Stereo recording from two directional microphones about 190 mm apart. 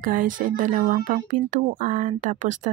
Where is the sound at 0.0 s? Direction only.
45° right (ahead or behind).